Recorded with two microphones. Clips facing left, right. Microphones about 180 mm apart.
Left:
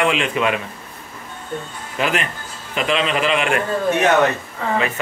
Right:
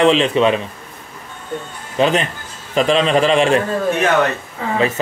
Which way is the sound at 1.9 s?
30° right (ahead or behind).